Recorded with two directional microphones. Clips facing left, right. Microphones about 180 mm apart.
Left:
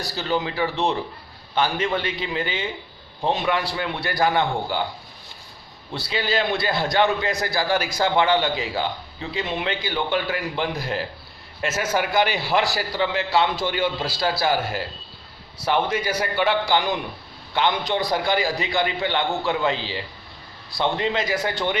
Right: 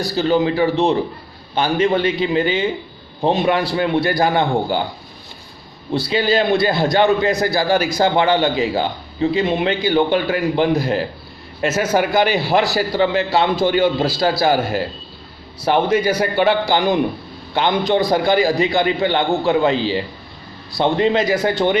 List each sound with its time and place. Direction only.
0.2 s a man's voice: 40° right (ahead or behind)
5.9 s a man's voice: 40° right (ahead or behind)
15.9 s a man's voice: 40° right (ahead or behind)